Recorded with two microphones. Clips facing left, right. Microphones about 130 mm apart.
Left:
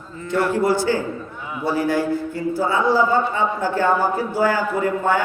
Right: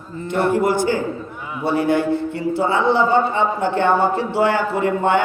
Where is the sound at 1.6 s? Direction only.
25° right (ahead or behind).